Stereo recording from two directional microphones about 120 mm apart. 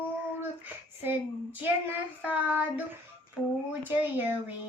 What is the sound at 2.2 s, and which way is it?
Child singing, 10° right (ahead or behind).